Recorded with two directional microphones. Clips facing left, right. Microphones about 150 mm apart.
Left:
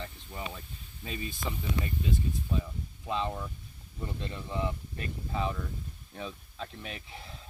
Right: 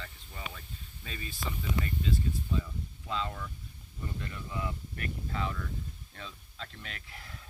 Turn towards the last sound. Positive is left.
turn(degrees=20)  # may be behind; listen again after turning